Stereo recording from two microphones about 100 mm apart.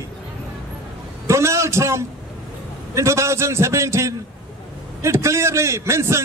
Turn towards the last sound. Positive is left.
turn(degrees=-25)  # may be behind; listen again after turning